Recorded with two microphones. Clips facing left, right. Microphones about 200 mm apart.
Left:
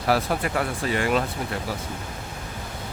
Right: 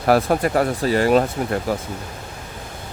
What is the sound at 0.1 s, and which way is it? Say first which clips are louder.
Speech: right 7 dB; 45° right (ahead or behind).